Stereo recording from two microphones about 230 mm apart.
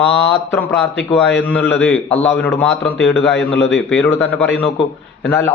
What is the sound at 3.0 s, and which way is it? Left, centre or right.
Mantra, left.